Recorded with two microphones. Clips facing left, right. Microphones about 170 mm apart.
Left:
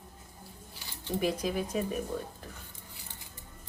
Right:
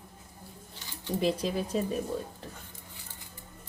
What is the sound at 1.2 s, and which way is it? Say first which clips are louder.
Speech: right 2 dB; 30° right (ahead or behind).